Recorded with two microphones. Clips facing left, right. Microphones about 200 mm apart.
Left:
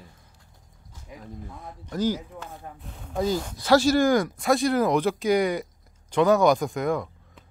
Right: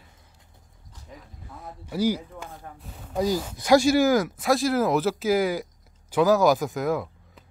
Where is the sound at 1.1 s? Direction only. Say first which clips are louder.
Left 3 dB; 10° left (ahead or behind).